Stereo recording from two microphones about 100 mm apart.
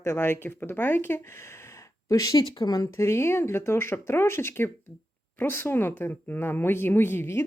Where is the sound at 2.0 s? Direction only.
35° left (ahead or behind).